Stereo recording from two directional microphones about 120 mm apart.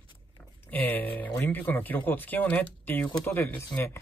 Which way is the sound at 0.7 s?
15° left (ahead or behind).